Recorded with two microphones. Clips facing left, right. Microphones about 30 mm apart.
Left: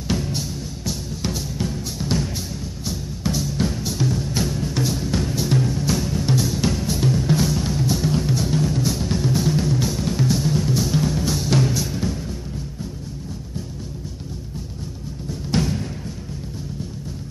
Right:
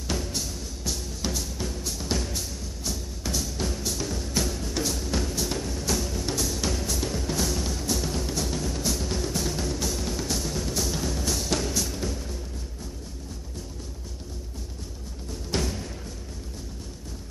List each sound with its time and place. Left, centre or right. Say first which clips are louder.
0.1 s music: left 6 dB; centre
15.5 s music: left 7 dB; centre